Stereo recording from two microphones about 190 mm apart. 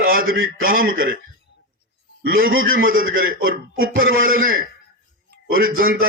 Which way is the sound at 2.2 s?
50° right (ahead or behind).